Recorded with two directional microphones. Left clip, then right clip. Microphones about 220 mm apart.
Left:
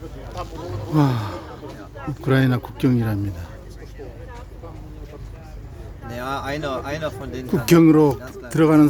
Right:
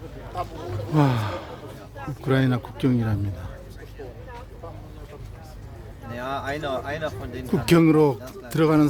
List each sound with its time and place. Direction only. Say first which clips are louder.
0.9 s a man's voice: left 1 dB; 10° right (ahead or behind)
2.2 s speech: left 3 dB; 5° left (ahead or behind)
6.1 s a sound: left 2 dB; 55° left (ahead or behind)
7.4 s speech: left 4 dB; centre (ahead or behind)